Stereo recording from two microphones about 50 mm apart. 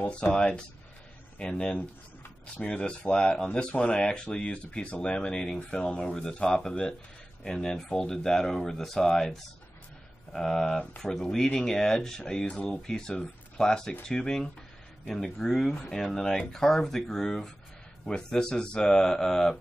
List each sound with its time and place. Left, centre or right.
0.1 s speech: left